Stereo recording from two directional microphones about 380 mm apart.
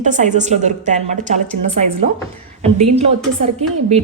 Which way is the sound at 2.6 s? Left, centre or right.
Centre.